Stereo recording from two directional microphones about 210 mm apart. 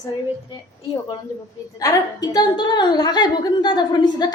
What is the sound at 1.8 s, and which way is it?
A woman's voice, 15° left (ahead or behind).